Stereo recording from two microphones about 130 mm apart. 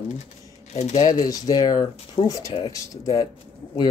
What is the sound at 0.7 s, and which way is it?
Speech, 55° left (ahead or behind).